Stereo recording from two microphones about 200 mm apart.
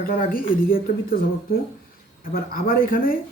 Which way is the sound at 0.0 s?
45° left (ahead or behind).